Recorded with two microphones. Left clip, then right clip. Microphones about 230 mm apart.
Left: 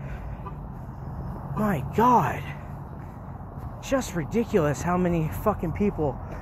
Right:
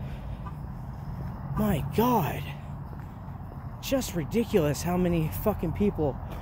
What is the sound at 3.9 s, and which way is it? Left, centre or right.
Speech, centre.